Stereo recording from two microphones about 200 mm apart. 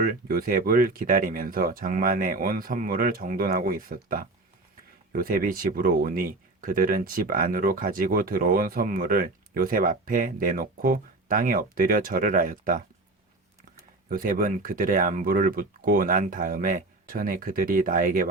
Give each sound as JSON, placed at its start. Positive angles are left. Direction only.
{"t": 0.0, "sound": "speech", "side_deg": -45}
{"t": 14.1, "sound": "speech", "side_deg": -45}